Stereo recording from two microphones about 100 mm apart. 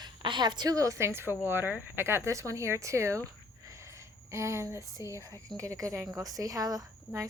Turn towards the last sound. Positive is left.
turn(degrees=-35)  # may be behind; listen again after turning